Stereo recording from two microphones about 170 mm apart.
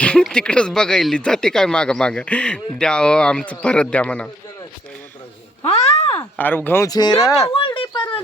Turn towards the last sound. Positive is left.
turn(degrees=30)  # may be behind; listen again after turning